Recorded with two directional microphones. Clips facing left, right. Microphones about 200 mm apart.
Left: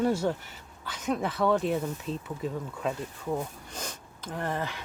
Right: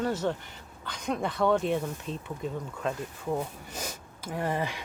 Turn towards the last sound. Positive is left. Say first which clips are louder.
# right 2 dB
turn(degrees=-15)  # may be behind; listen again after turning